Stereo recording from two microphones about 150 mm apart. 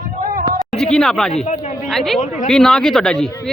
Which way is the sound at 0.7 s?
5° left (ahead or behind).